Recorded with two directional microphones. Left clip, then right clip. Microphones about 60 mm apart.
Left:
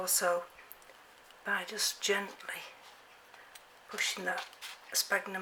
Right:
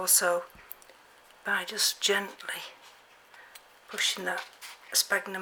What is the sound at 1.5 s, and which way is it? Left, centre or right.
Speech, right.